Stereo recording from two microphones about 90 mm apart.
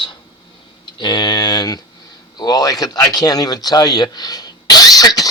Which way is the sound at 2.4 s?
45° left (ahead or behind).